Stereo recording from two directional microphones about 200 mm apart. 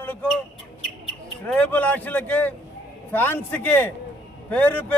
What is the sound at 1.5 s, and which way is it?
Speech, 5° left (ahead or behind).